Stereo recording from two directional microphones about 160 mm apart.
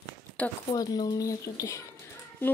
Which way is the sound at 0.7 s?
25° left (ahead or behind).